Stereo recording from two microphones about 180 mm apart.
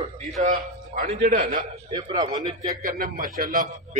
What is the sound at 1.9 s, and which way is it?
Speech, 20° right (ahead or behind).